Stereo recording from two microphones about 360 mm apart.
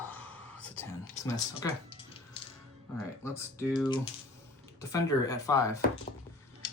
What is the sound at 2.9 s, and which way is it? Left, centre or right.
Speech, centre.